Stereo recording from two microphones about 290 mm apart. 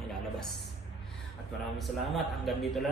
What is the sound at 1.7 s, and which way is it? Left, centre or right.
Speech, centre.